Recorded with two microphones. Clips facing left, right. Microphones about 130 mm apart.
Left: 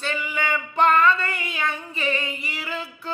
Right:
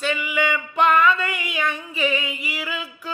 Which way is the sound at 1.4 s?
30° left (ahead or behind).